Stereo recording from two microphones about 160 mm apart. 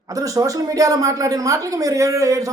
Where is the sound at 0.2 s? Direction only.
20° right (ahead or behind).